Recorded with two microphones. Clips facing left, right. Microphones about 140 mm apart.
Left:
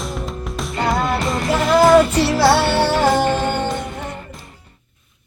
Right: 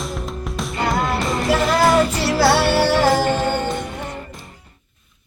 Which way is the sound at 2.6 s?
25° left (ahead or behind).